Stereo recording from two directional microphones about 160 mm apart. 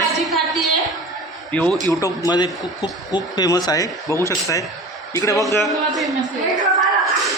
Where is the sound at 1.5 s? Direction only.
5° left (ahead or behind).